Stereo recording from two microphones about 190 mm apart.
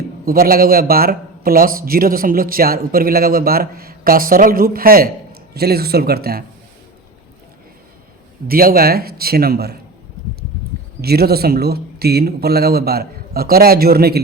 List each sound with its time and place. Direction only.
0.3 s speech: 50° right (ahead or behind)
8.4 s speech: 50° right (ahead or behind)
11.0 s speech: 55° right (ahead or behind)